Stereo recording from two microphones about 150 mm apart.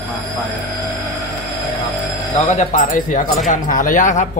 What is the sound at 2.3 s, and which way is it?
Speech, 50° left (ahead or behind).